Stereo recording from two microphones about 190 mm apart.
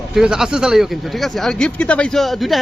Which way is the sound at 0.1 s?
5° right (ahead or behind).